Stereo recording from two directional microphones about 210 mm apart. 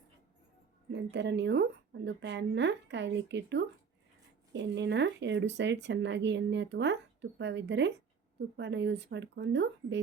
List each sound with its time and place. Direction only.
1.1 s speech: 55° right (ahead or behind)